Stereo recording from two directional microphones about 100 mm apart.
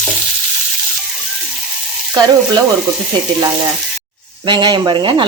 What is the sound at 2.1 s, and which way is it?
Frying, 40° right (ahead or behind).